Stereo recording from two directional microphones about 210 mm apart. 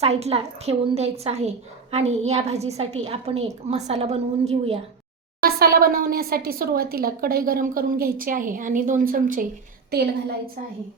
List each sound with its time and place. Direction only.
0.0 s a woman's voice: 30° right (ahead or behind)
5.4 s speech: 45° right (ahead or behind)